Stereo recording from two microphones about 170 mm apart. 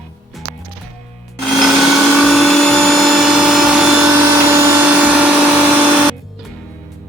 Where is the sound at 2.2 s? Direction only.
Centre (ahead or behind).